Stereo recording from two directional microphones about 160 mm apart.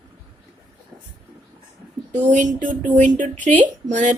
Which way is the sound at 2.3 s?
55° right (ahead or behind).